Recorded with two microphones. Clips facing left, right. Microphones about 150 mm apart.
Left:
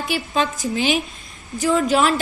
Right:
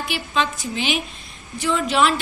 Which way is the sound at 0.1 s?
45° left (ahead or behind).